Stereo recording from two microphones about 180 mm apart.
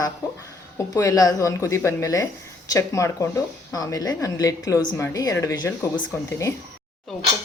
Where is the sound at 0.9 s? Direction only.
20° left (ahead or behind).